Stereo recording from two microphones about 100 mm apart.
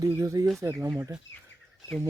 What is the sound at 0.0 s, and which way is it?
Speech, 30° right (ahead or behind).